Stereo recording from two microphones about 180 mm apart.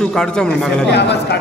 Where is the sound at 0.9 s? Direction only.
70° left (ahead or behind).